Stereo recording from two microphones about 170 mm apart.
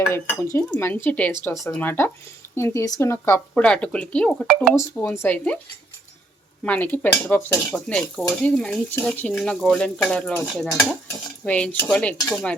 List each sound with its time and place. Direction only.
0.1 s speech: 15° left (ahead or behind); by 4.7 s centre (ahead or behind)
4.7 s speech: 15° left (ahead or behind)
6.7 s speech: 10° left (ahead or behind)